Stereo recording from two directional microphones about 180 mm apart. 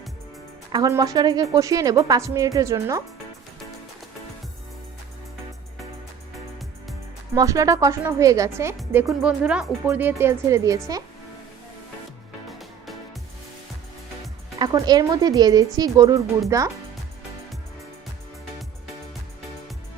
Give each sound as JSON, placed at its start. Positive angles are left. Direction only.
{"t": 0.7, "sound": "speech", "side_deg": -20}
{"t": 7.3, "sound": "a woman's voice", "side_deg": -20}
{"t": 14.6, "sound": "a woman's voice", "side_deg": -20}